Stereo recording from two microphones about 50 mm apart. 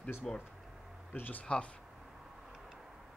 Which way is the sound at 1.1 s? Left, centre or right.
Left.